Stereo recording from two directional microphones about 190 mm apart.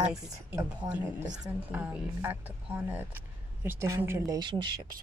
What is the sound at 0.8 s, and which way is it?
Speech, 5° right (ahead or behind).